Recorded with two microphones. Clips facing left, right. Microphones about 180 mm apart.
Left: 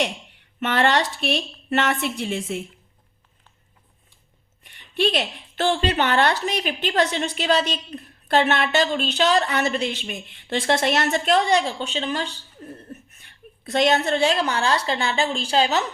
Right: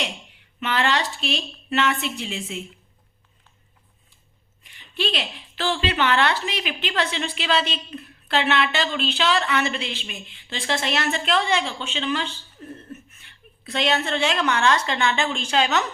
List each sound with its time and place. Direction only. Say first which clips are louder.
0.6 s a woman's voice: left 3 dB; 50° left (ahead or behind)
4.9 s a woman's voice: left 5 dB; 50° left (ahead or behind); by 15.8 s 35° left (ahead or behind)